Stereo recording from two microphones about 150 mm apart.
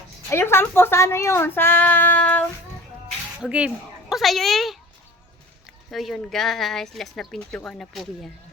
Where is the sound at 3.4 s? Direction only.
5° right (ahead or behind).